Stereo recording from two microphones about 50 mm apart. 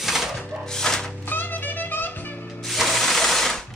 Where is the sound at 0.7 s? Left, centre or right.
Centre.